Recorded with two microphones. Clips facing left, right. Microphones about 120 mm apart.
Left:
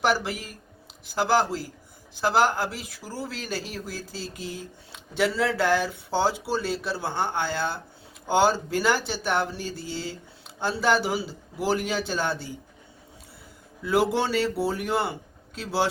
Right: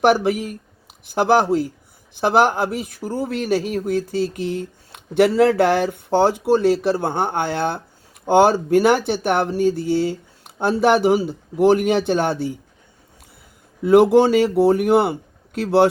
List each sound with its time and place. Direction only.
0.0 s speech: 55° right (ahead or behind)
13.8 s speech: 60° right (ahead or behind)